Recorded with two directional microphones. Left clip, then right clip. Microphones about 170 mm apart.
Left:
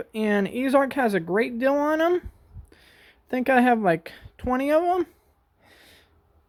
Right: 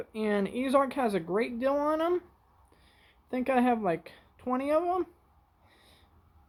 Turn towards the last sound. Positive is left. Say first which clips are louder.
# left 8 dB
turn(degrees=55)  # may be behind; listen again after turning